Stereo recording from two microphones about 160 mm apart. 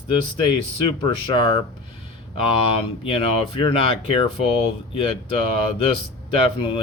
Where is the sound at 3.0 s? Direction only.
35° left (ahead or behind).